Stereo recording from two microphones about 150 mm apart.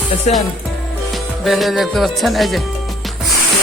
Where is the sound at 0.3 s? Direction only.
45° left (ahead or behind).